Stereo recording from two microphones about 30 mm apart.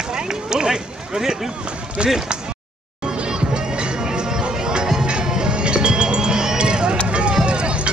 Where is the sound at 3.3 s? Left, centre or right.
Right.